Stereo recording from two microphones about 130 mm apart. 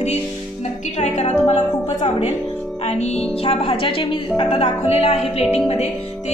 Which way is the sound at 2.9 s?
60° left (ahead or behind).